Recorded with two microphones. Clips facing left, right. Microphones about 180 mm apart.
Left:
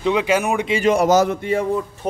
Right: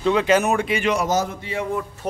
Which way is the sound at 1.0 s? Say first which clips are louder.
Left 7 dB; 70° left (ahead or behind).